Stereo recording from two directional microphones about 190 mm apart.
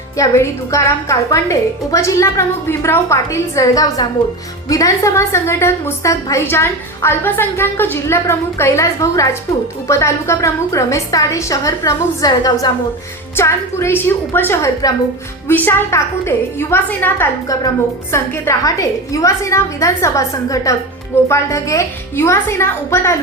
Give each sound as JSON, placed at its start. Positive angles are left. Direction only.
{"t": 0.2, "sound": "a woman's voice", "side_deg": 15}